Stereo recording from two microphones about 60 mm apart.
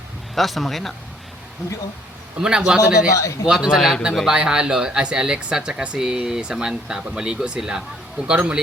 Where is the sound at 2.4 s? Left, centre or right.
Centre.